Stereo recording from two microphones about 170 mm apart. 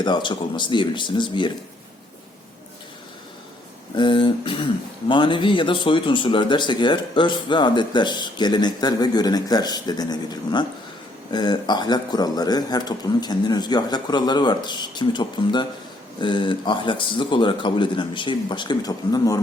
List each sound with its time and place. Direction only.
0.0 s speech: 25° left (ahead or behind)
3.9 s speech: 30° left (ahead or behind)